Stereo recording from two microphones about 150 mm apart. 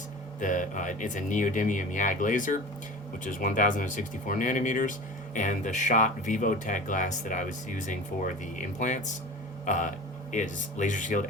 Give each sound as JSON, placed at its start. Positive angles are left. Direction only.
{"t": 0.3, "sound": "speech", "side_deg": 60}